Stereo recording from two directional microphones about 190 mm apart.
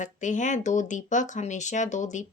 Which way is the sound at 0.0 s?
40° left (ahead or behind).